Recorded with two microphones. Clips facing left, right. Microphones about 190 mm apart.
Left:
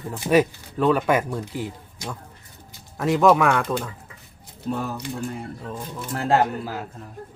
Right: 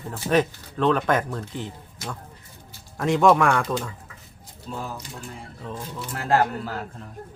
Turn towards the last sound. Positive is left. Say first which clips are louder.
# left 1 dB
turn(degrees=10)  # may be behind; listen again after turning